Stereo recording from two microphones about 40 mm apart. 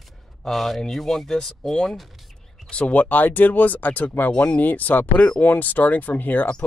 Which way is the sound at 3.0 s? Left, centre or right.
Left.